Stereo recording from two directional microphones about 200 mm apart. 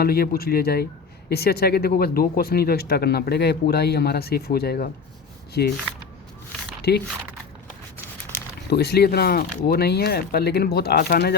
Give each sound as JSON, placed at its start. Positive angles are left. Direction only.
{"t": 0.0, "sound": "speech", "side_deg": 50}
{"t": 6.9, "sound": "speech", "side_deg": 55}
{"t": 8.7, "sound": "speech", "side_deg": 55}